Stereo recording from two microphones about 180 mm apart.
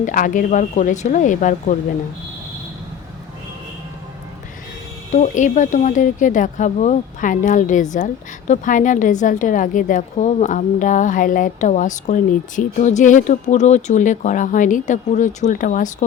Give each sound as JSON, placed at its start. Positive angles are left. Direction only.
{"t": 0.0, "sound": "speech", "side_deg": 45}
{"t": 5.1, "sound": "speech", "side_deg": 45}